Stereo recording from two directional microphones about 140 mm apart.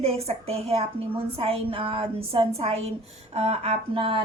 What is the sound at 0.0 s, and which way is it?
A woman's voice, 45° right (ahead or behind).